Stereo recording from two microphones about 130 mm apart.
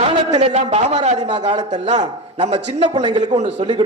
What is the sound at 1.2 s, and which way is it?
Speech, 35° right (ahead or behind).